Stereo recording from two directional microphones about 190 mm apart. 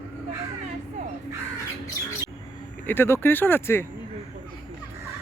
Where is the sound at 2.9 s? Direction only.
10° left (ahead or behind).